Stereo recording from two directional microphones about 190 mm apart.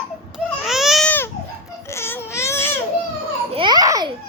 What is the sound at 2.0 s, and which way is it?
Baby cry, 15° left (ahead or behind).